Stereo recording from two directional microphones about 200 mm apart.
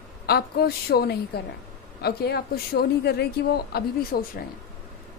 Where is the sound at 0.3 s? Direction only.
50° left (ahead or behind).